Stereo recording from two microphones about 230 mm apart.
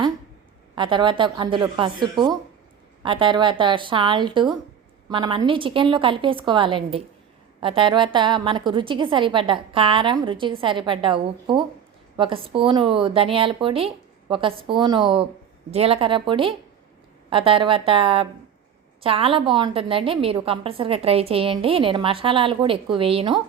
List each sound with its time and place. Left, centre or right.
0.8 s a woman's voice: right